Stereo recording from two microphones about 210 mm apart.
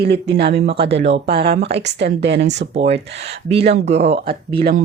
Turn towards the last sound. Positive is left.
turn(degrees=-25)  # may be behind; listen again after turning